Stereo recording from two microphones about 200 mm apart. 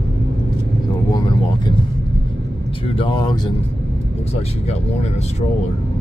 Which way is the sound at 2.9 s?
25° left (ahead or behind).